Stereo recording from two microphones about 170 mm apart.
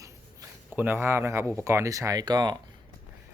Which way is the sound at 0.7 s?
10° right (ahead or behind).